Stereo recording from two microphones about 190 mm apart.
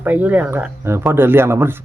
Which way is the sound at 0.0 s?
10° right (ahead or behind).